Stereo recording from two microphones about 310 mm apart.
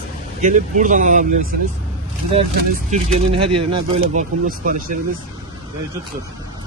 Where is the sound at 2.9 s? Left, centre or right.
Centre.